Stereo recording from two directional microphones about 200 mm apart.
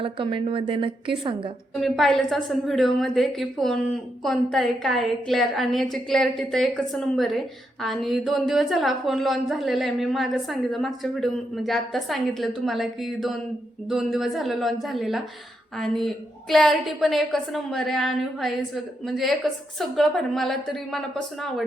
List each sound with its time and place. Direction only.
0.0 s a woman's voice: 25° right (ahead or behind)
1.8 s a woman's voice: centre (ahead or behind)